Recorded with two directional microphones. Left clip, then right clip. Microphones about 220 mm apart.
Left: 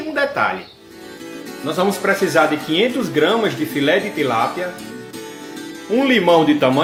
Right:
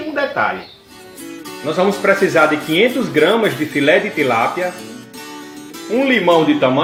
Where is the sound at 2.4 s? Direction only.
15° right (ahead or behind).